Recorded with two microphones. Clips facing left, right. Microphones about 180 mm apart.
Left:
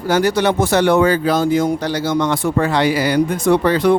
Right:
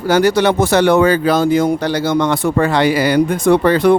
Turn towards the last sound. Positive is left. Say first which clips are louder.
# right 3 dB
turn(degrees=-55)  # may be behind; listen again after turning